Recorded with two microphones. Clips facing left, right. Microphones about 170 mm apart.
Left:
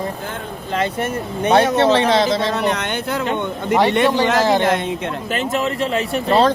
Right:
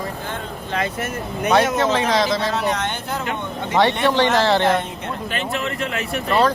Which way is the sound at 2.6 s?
60° left (ahead or behind).